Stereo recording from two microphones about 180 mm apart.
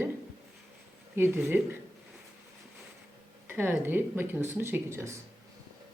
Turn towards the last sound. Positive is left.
turn(degrees=-15)  # may be behind; listen again after turning